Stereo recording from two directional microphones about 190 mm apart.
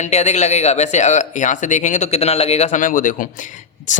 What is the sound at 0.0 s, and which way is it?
Speech, 35° left (ahead or behind).